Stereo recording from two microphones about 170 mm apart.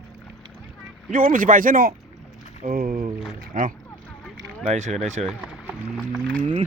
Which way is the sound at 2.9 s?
35° right (ahead or behind).